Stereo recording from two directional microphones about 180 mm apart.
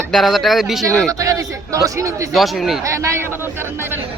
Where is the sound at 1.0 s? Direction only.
20° right (ahead or behind).